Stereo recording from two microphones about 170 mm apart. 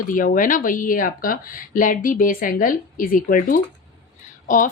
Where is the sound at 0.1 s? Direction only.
55° left (ahead or behind).